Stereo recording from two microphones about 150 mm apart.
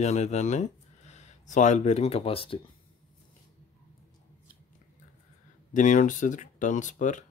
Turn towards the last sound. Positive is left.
turn(degrees=55)  # may be behind; listen again after turning